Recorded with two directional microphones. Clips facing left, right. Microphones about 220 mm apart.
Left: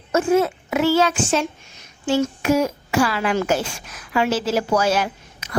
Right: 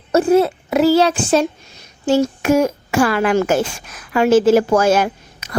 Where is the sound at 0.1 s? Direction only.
35° right (ahead or behind).